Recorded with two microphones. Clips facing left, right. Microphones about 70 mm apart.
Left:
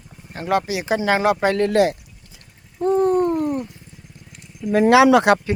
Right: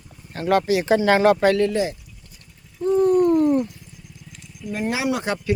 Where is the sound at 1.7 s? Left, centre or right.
Left.